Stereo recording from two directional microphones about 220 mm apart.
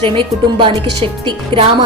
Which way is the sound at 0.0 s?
25° right (ahead or behind).